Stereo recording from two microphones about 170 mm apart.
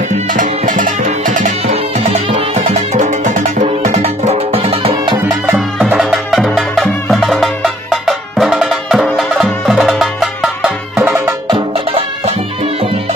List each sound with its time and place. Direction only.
0.3 s music: 50° right (ahead or behind); by 5.2 s 30° right (ahead or behind)
5.9 s music: 5° right (ahead or behind)